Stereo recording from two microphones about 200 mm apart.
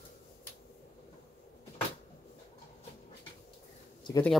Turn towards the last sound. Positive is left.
turn(degrees=20)  # may be behind; listen again after turning